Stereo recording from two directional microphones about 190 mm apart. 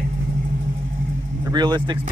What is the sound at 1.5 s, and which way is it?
Speech, 20° right (ahead or behind).